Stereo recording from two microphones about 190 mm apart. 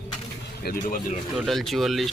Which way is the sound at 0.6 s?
50° left (ahead or behind).